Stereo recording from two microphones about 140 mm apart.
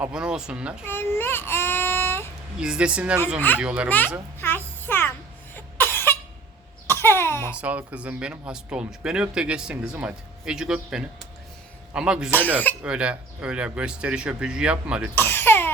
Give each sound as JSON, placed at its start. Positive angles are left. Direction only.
{"t": 0.0, "sound": "speech", "side_deg": -5}
{"t": 0.9, "sound": "child singing", "side_deg": 15}
{"t": 2.6, "sound": "speech", "side_deg": -5}
{"t": 3.8, "sound": "a child's voice", "side_deg": 10}
{"t": 4.4, "sound": "music", "side_deg": 15}
{"t": 5.5, "sound": "cough", "side_deg": 15}
{"t": 7.5, "sound": "a man's voice", "side_deg": -10}
{"t": 15.1, "sound": "cough", "side_deg": 15}